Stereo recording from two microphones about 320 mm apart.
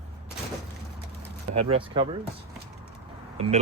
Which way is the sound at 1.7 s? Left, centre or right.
Centre.